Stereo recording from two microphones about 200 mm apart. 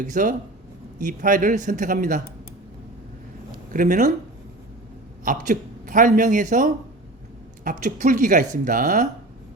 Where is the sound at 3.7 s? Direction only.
40° right (ahead or behind).